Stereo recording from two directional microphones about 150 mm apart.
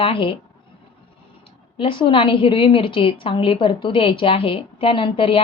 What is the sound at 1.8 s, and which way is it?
A woman's voice, 35° left (ahead or behind).